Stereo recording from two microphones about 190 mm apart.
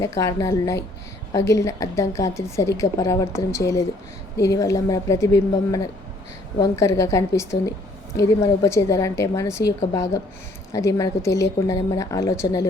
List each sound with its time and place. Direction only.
0.0 s a woman's voice: 15° left (ahead or behind)
10.7 s a woman's voice: 15° left (ahead or behind)